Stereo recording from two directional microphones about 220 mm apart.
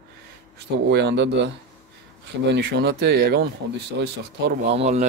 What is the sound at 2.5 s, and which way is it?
Speech, 50° right (ahead or behind).